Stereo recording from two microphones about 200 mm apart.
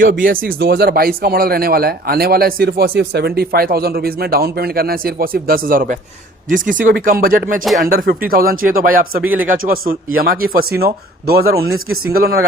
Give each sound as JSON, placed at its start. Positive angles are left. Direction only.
{"t": 0.0, "sound": "speech", "side_deg": -45}